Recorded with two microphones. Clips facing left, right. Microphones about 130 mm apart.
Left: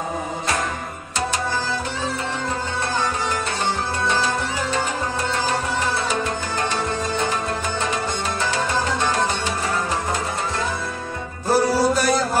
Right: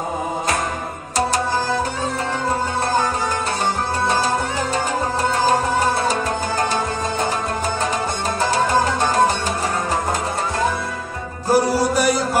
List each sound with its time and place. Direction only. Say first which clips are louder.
5.3 s music: right 7 dB; 45° right (ahead or behind)
8.4 s music: right 7 dB; 40° right (ahead or behind)
11.5 s music: right 1 dB; 15° right (ahead or behind)